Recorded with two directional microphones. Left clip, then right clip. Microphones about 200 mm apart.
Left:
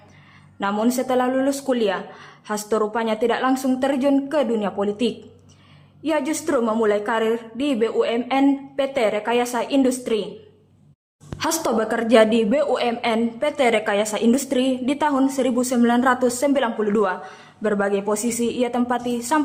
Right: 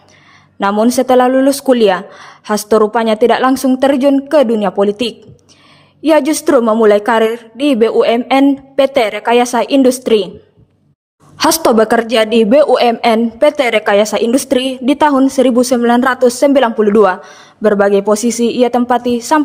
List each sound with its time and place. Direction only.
0.6 s a woman's voice: 40° right (ahead or behind)
11.3 s a woman's voice: 45° right (ahead or behind)